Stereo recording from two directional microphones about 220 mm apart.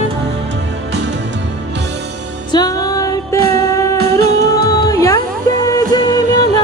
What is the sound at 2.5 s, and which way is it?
Music, 20° left (ahead or behind).